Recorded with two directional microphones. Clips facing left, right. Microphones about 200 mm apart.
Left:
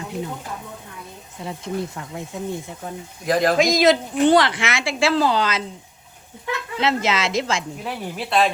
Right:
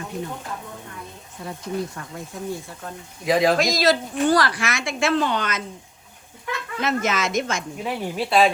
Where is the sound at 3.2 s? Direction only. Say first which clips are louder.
Left 1 dB; centre (ahead or behind).